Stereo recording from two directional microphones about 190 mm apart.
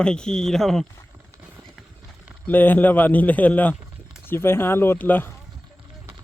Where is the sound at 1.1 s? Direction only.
10° right (ahead or behind).